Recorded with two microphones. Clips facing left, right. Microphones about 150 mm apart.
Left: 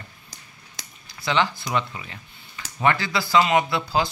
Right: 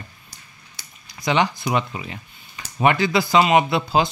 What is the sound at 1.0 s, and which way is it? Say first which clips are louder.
Speech: right 3 dB; 15° right (ahead or behind).